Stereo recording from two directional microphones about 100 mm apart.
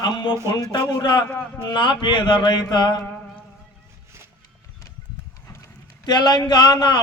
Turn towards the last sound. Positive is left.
turn(degrees=45)  # may be behind; listen again after turning